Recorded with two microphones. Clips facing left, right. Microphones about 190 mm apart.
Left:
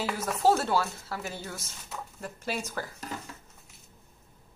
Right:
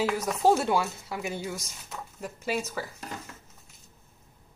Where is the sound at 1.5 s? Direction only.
5° left (ahead or behind).